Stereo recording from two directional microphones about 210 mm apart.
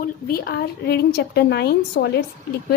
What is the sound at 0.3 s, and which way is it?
A woman's voice, 50° left (ahead or behind).